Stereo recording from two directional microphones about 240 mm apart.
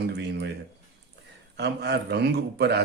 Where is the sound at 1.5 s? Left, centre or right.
Right.